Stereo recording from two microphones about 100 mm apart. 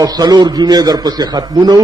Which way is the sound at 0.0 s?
40° right (ahead or behind).